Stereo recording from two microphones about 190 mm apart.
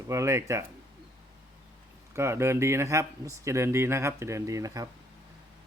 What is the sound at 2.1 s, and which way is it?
Speech, 15° right (ahead or behind).